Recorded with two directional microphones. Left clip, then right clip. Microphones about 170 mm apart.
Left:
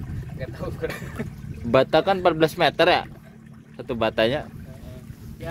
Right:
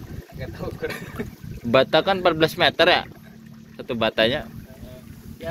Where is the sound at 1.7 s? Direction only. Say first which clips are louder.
Right 1 dB; 25° left (ahead or behind).